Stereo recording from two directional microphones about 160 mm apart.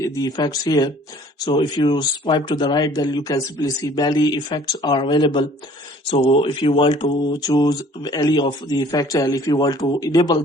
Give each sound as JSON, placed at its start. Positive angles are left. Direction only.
{"t": 0.0, "sound": "speech", "side_deg": 25}